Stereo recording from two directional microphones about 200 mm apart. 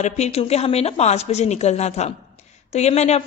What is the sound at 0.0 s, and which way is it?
A woman's voice, 35° left (ahead or behind).